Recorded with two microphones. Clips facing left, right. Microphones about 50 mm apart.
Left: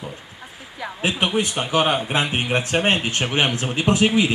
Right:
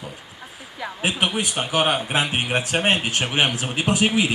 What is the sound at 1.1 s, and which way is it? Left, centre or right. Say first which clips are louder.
A man's voice: left 3 dB; centre.